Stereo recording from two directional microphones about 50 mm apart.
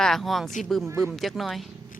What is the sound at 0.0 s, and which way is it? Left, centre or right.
Speech, centre.